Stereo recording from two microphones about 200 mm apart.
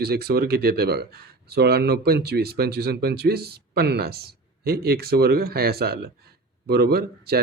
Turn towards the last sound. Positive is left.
turn(degrees=-50)  # may be behind; listen again after turning